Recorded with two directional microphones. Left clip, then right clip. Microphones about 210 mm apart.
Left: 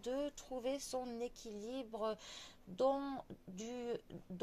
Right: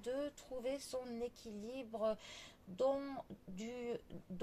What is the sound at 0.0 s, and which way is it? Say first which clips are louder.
Speech: left 1 dB; 35° left (ahead or behind).